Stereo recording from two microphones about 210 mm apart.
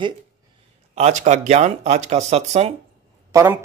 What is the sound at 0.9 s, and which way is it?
Speech, 30° right (ahead or behind).